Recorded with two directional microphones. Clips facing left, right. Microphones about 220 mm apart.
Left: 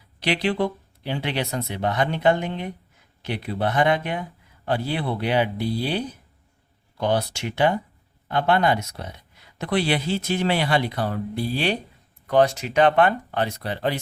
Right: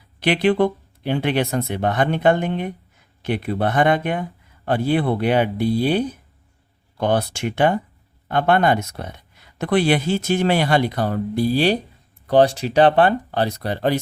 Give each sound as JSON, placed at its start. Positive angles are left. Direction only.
{"t": 0.2, "sound": "speech", "side_deg": -55}